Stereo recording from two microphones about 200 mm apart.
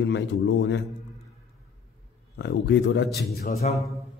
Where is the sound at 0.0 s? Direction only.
60° left (ahead or behind).